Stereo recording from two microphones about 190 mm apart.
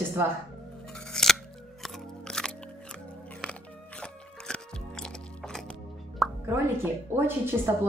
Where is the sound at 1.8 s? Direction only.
5° left (ahead or behind).